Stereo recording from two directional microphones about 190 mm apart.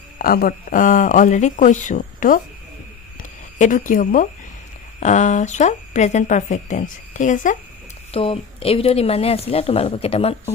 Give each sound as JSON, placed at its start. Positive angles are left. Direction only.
{"t": 0.2, "sound": "speech", "side_deg": 50}
{"t": 3.2, "sound": "a sound", "side_deg": 40}
{"t": 5.0, "sound": "speech", "side_deg": 40}
{"t": 8.1, "sound": "speech", "side_deg": 30}